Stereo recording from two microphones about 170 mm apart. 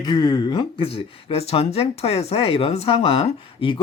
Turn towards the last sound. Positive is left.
turn(degrees=30)  # may be behind; listen again after turning